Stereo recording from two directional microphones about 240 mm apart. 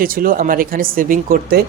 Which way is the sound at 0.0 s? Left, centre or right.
Right.